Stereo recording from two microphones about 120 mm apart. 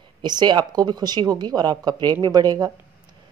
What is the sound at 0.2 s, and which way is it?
A woman's voice, 35° right (ahead or behind).